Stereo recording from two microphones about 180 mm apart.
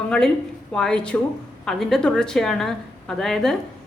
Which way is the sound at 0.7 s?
5° left (ahead or behind).